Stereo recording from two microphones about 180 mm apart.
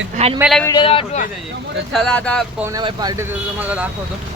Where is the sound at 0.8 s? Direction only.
30° left (ahead or behind).